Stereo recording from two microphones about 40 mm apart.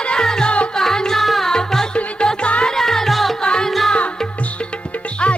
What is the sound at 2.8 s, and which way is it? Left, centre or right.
Music, centre.